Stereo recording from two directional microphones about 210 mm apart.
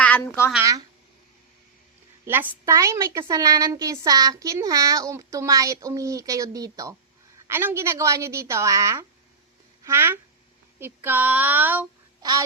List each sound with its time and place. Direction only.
0.0 s a woman's voice: 10° left (ahead or behind)
0.5 s a woman's voice: 15° right (ahead or behind)
2.2 s a woman's voice: 10° right (ahead or behind)